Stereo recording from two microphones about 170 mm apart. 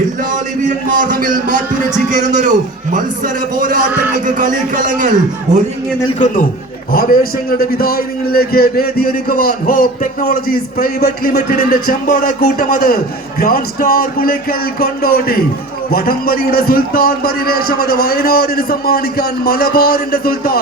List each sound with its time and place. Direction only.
2.0 s a man's voice: 45° right (ahead or behind)
6.1 s a man's voice: 45° left (ahead or behind)
6.9 s a man's voice: 55° left (ahead or behind)